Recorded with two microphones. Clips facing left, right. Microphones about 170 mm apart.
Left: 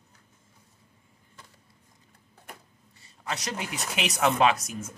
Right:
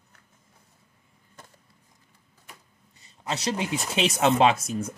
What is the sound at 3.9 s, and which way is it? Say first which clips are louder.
Speech: right 3 dB; 25° right (ahead or behind).